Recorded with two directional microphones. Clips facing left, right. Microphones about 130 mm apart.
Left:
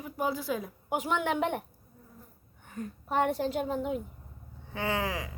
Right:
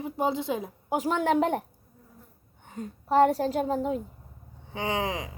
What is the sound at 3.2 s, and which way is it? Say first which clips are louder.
Speech: right 6 dB; 35° right (ahead or behind).